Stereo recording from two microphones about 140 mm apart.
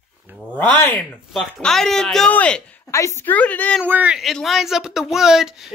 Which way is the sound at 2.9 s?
20° left (ahead or behind).